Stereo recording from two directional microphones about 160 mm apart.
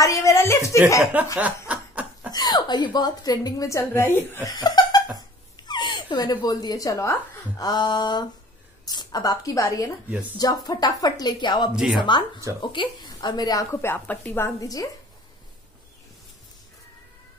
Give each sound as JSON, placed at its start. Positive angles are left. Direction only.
{"t": 0.0, "sound": "a sound", "side_deg": 20}
{"t": 1.1, "sound": "a sound", "side_deg": -10}
{"t": 1.7, "sound": "snicker", "side_deg": -10}
{"t": 2.3, "sound": "a woman's voice", "side_deg": 25}
{"t": 11.7, "sound": "speech", "side_deg": -5}
{"t": 12.0, "sound": "a woman's voice", "side_deg": 30}